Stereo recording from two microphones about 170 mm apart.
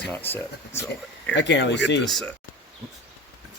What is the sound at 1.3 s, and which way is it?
Speech, 90° left.